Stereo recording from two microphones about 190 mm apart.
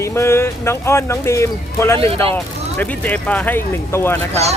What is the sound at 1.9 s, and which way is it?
Speech, 30° right (ahead or behind).